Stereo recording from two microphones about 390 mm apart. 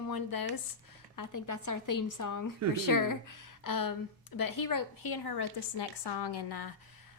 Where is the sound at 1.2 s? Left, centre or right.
Left.